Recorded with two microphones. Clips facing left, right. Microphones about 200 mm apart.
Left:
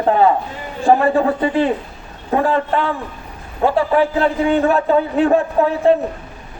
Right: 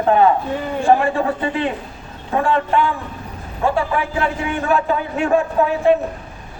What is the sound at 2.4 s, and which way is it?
A man's voice, 30° left (ahead or behind).